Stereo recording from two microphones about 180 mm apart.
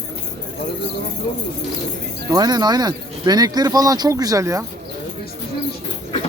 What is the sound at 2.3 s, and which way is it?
Speech, 20° right (ahead or behind).